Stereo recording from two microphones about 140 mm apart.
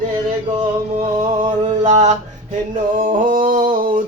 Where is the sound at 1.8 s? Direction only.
55° right (ahead or behind).